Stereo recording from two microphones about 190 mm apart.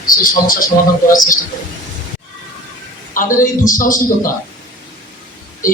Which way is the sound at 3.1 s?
45° left (ahead or behind).